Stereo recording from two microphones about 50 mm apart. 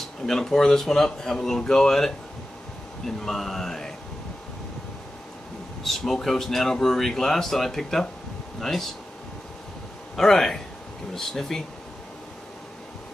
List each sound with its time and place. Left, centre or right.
0.3 s speech: centre
5.9 s speech: centre
10.1 s speech: centre